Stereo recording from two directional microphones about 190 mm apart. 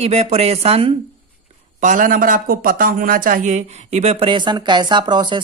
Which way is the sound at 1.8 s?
45° right (ahead or behind).